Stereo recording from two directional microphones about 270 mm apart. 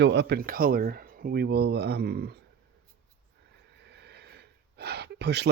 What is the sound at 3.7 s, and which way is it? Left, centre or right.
Gasp, right.